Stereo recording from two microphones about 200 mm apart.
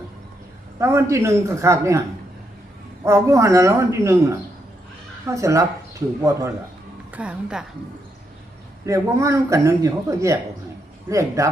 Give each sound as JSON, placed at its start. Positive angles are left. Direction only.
{"t": 0.8, "sound": "a man's voice", "side_deg": -15}
{"t": 3.0, "sound": "a man's voice", "side_deg": -15}
{"t": 8.9, "sound": "a man's voice", "side_deg": -15}